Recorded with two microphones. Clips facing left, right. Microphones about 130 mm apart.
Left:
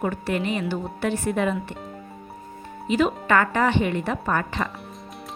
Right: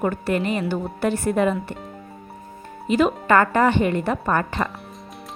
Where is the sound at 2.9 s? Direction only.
45° right (ahead or behind).